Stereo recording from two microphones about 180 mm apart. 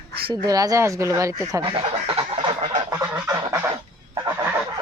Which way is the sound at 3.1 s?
15° right (ahead or behind).